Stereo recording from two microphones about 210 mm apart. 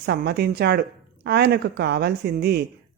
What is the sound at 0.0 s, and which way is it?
Speech, 50° right (ahead or behind).